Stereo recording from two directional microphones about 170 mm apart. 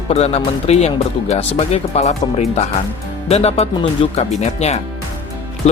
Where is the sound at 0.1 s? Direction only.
35° left (ahead or behind).